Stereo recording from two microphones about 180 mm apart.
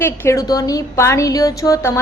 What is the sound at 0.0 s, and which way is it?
A woman's voice, 15° left (ahead or behind).